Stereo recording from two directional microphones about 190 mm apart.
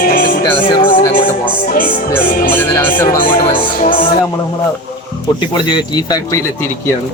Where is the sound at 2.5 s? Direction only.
10° left (ahead or behind).